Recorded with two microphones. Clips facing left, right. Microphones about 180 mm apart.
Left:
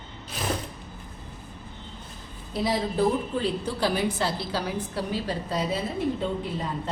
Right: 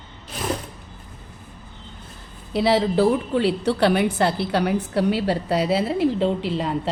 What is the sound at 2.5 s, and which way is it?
A woman's voice, 75° right (ahead or behind).